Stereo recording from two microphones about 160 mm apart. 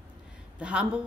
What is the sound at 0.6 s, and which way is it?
Speech, 5° right (ahead or behind).